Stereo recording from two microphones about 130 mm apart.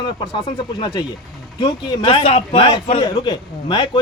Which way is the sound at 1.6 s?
45° left (ahead or behind).